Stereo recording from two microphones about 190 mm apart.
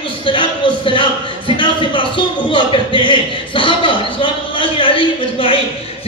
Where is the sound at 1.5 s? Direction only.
25° left (ahead or behind).